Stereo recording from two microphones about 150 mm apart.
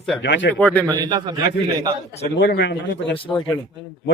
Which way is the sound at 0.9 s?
30° right (ahead or behind).